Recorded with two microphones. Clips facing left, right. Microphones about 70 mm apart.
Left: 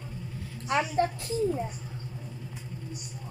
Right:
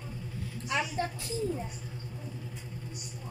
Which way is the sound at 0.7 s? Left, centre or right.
Left.